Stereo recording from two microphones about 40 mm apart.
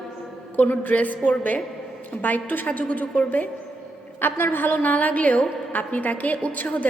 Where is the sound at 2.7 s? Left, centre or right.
Left.